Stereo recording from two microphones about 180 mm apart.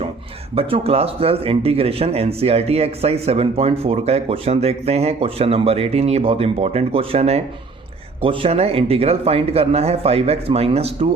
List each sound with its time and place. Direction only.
0.5 s speech: 35° right (ahead or behind)